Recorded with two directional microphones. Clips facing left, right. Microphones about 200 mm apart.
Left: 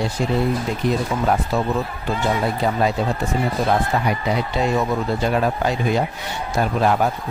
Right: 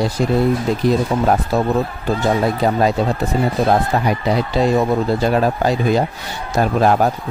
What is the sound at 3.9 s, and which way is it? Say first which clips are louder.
Speech: right 3 dB; 40° right (ahead or behind).